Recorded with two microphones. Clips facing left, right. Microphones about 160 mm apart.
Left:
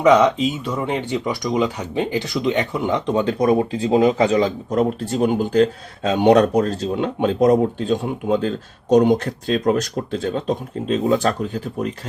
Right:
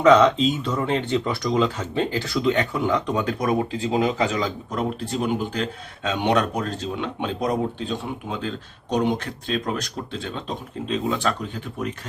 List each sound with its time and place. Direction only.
0.0 s speech: 10° left (ahead or behind); by 11.9 s 40° left (ahead or behind)